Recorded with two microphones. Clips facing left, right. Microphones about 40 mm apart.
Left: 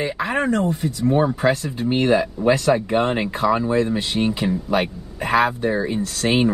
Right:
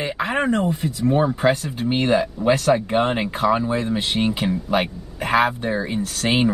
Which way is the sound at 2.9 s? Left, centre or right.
Right.